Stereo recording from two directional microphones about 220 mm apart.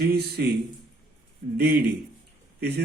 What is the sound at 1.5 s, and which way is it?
A man's voice, 45° right (ahead or behind).